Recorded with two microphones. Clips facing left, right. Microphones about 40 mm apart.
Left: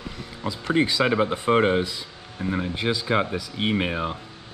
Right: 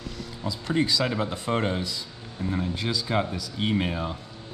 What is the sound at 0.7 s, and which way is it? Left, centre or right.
Speech, left.